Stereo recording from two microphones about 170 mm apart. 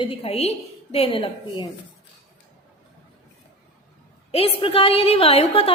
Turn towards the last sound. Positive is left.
turn(degrees=35)  # may be behind; listen again after turning